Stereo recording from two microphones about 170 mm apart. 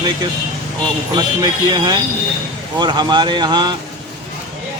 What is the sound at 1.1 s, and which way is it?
Speech, 25° right (ahead or behind).